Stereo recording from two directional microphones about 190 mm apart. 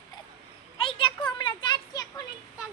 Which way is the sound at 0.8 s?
25° left (ahead or behind).